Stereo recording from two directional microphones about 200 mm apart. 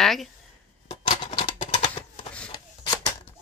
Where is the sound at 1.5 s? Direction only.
30° left (ahead or behind).